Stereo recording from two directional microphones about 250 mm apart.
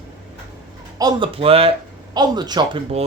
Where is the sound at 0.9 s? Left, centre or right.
Centre.